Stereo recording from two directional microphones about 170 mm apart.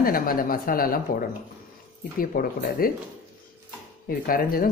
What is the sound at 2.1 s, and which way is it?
Speech, 60° left (ahead or behind).